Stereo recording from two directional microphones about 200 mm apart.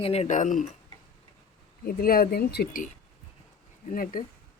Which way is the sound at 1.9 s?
50° left (ahead or behind).